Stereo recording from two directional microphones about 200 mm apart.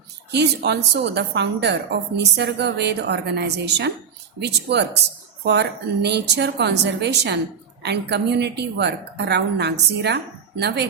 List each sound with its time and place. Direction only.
0.3 s a woman's voice: 55° right (ahead or behind)